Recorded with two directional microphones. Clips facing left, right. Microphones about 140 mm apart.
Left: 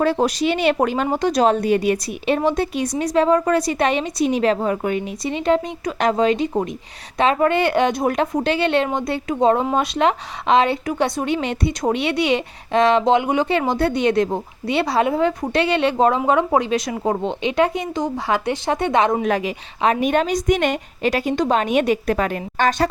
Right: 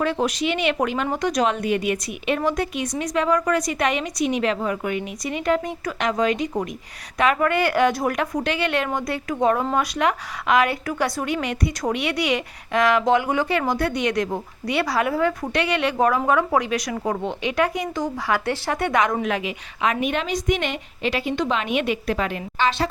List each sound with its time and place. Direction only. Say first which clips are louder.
0.0 s speech: left 4 dB; 35° left (ahead or behind)
19.3 s a woman's voice: left 4 dB; 40° left (ahead or behind)